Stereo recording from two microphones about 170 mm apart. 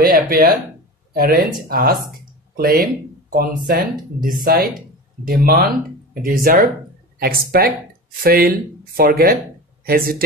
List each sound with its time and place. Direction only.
0.0 s speech: 60° right (ahead or behind)